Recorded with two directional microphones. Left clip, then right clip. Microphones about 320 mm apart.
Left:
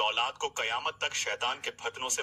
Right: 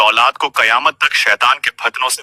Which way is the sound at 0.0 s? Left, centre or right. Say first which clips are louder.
Right 18 dB; right.